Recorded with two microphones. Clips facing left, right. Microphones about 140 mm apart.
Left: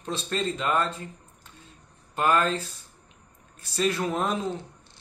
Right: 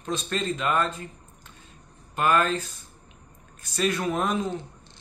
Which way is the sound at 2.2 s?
25° left (ahead or behind).